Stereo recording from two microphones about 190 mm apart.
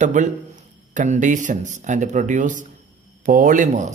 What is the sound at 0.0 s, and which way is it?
Speech, 40° right (ahead or behind).